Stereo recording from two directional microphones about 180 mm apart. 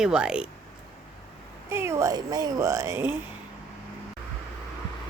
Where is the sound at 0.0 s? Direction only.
5° right (ahead or behind).